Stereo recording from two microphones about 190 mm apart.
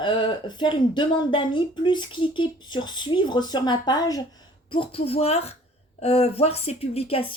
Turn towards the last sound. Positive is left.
turn(degrees=30)  # may be behind; listen again after turning